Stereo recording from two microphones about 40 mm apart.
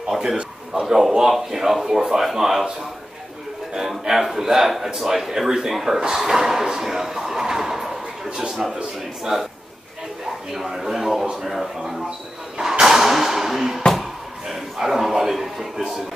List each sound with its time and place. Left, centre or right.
0.0 s a man's voice: centre
1.3 s speech: centre
4.0 s speech: centre
10.5 s speech: centre
12.5 s a sound: centre
14.5 s a man's voice: centre